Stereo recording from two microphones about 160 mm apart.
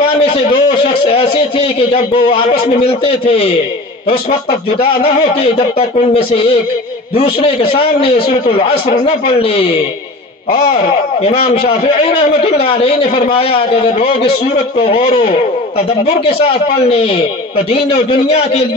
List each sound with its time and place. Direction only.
0.2 s a man's voice: 35° left (ahead or behind)
16.3 s a man's voice: 35° left (ahead or behind)